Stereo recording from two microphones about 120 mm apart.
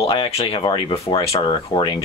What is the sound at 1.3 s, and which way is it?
Speech, 50° left (ahead or behind).